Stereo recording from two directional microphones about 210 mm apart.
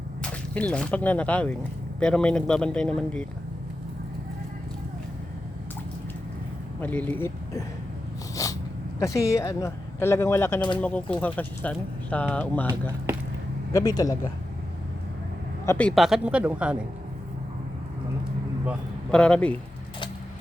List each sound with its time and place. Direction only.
0.2 s speech: 5° left (ahead or behind)
6.8 s speech: 5° left (ahead or behind)
8.4 s sneeze: 15° left (ahead or behind)
9.0 s speech: 15° left (ahead or behind)
13.7 s speech: 20° left (ahead or behind)
15.6 s speech: 10° left (ahead or behind)
19.1 s speech: 5° left (ahead or behind)